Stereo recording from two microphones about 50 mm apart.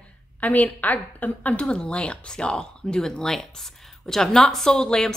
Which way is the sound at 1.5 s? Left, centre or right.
Centre.